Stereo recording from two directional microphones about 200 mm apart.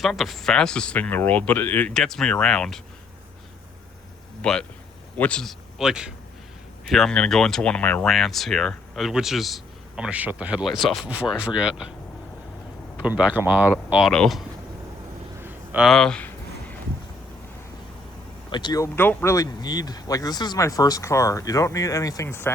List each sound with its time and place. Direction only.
0.0 s speech: centre (ahead or behind)
4.4 s speech: 5° left (ahead or behind)
13.0 s speech: 5° right (ahead or behind)
15.4 s a sound: 10° right (ahead or behind)
18.5 s speech: 20° left (ahead or behind)